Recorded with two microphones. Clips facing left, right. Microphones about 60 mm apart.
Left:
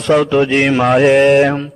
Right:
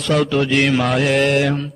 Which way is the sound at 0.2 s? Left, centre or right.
Centre.